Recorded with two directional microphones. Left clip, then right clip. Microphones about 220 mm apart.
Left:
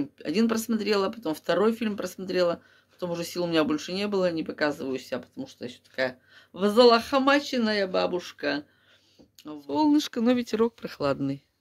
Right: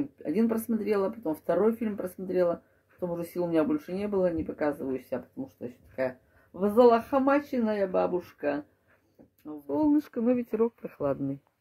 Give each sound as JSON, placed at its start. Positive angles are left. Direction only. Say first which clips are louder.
{"t": 0.2, "sound": "speech", "louder": "left 2 dB", "side_deg": 10}
{"t": 9.4, "sound": "speech", "louder": "left 3 dB", "side_deg": 25}